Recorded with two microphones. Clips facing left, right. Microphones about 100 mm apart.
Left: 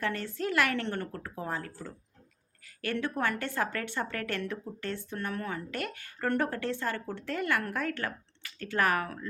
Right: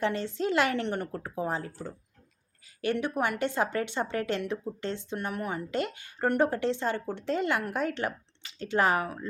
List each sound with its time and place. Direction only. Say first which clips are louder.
0.0 s speech: right 4 dB; 20° right (ahead or behind)